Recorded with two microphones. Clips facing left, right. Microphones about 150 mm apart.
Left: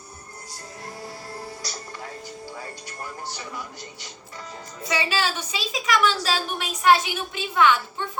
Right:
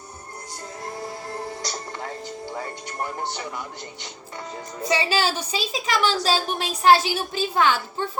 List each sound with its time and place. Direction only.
4.9 s a woman's voice: 30° right (ahead or behind)